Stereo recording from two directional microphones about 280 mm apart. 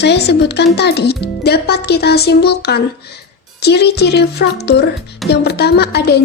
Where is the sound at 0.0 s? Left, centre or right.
Left.